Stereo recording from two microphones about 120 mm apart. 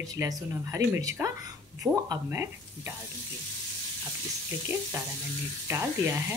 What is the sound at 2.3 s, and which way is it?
Speech, 20° right (ahead or behind).